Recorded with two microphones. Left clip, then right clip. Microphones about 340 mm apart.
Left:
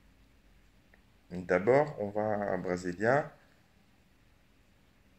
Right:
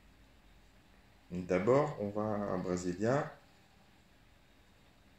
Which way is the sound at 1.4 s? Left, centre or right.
Left.